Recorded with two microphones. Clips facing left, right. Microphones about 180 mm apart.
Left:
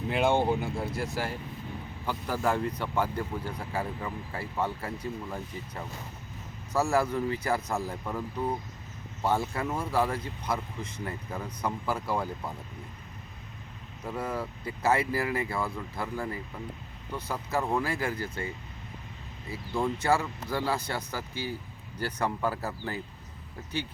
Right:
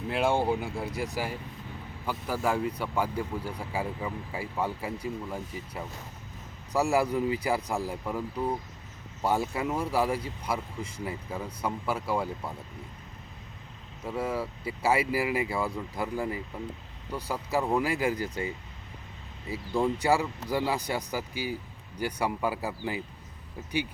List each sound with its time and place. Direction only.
0.1 s speech: 5° right (ahead or behind)
14.0 s speech: 5° right (ahead or behind)